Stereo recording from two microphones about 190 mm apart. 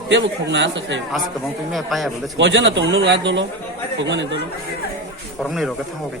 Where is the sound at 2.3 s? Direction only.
70° right (ahead or behind).